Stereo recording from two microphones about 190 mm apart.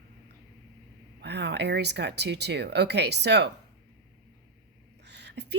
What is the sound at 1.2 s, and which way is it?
Speech, 65° right (ahead or behind).